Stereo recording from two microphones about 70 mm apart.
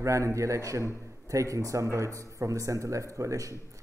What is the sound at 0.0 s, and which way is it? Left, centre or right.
Speech, right.